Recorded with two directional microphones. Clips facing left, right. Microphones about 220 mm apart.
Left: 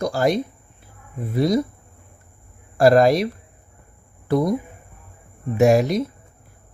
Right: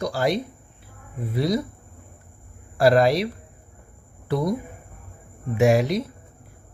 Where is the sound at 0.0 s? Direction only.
45° left (ahead or behind).